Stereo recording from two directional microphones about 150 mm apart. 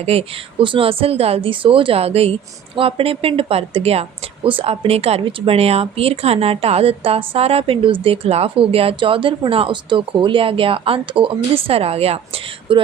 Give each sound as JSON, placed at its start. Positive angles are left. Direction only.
{"t": 0.0, "sound": "speech", "side_deg": -40}